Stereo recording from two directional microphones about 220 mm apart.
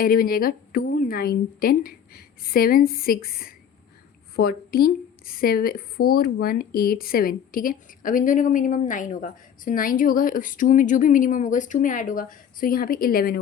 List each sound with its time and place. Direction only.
0.0 s a woman's voice: 40° left (ahead or behind)